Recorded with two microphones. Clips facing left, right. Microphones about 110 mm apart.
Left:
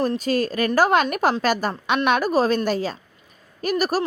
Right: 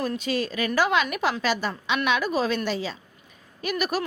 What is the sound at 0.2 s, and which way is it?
A woman's voice, 45° left (ahead or behind).